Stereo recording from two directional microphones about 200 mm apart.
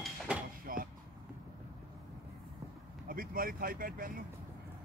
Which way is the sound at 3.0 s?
45° right (ahead or behind).